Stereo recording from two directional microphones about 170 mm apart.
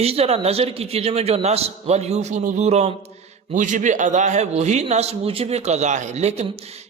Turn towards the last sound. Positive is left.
turn(degrees=-40)  # may be behind; listen again after turning